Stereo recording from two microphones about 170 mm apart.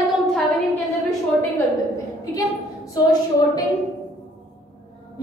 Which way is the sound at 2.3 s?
20° left (ahead or behind).